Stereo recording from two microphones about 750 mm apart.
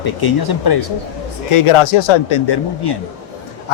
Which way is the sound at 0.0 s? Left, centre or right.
Left.